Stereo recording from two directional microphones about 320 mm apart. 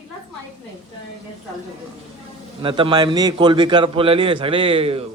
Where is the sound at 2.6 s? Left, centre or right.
Centre.